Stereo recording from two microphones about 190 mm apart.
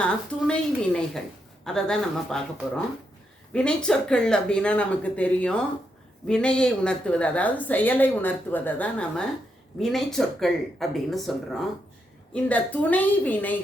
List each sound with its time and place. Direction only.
0.0 s a woman's voice: 5° left (ahead or behind)